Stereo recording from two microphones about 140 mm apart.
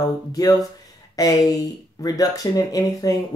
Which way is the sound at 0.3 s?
25° left (ahead or behind).